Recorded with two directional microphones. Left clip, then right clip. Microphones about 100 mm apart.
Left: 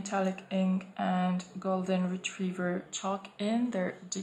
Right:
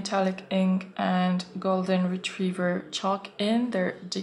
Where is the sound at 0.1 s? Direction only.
30° right (ahead or behind).